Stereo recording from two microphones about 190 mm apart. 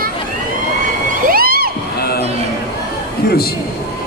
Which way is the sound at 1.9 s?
55° left (ahead or behind).